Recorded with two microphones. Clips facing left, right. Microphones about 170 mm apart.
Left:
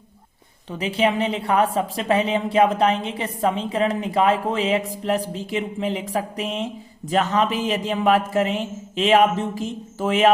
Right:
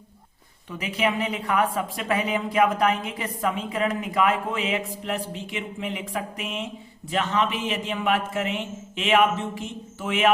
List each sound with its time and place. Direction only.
0.7 s a woman's voice: 30° left (ahead or behind)